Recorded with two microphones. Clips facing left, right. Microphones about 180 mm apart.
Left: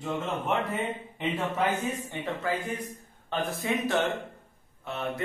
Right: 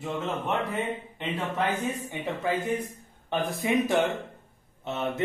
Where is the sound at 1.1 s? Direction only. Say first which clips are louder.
Left 2 dB; centre (ahead or behind).